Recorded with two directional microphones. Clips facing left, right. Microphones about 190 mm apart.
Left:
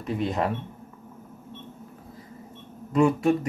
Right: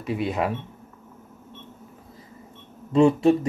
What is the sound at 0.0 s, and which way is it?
Speech, 5° right (ahead or behind).